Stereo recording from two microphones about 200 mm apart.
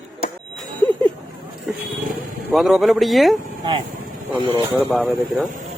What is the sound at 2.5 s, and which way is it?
Speech, centre (ahead or behind).